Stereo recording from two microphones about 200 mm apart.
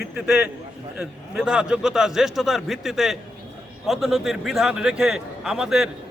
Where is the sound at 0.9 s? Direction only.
5° right (ahead or behind).